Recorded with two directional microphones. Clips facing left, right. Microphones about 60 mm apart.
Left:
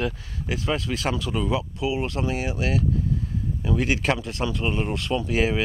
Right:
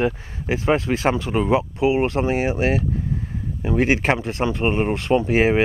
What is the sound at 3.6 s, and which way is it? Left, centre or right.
Speech, right.